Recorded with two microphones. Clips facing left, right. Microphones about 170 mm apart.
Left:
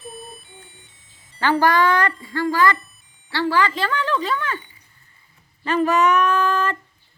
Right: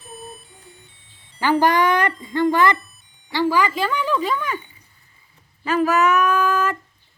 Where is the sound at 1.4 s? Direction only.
15° right (ahead or behind).